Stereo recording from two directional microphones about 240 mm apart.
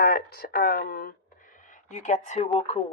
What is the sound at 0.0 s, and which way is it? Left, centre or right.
Speech, left.